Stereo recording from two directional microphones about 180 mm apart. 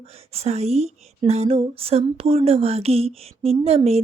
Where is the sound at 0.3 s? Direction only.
35° right (ahead or behind).